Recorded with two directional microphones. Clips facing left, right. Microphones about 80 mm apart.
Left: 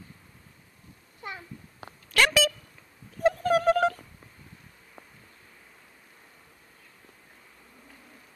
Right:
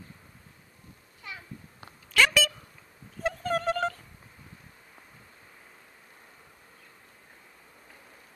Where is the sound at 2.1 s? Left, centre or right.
Centre.